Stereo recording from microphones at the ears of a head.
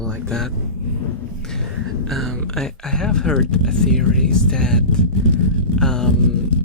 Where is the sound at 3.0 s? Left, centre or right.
Left.